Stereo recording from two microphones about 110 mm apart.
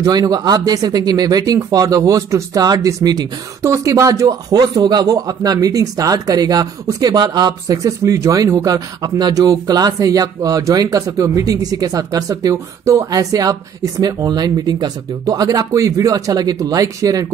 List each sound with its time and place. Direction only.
0.0 s speech: 35° right (ahead or behind)